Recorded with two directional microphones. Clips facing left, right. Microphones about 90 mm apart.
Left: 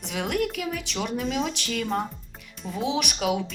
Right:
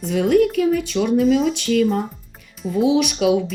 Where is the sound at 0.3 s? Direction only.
45° right (ahead or behind).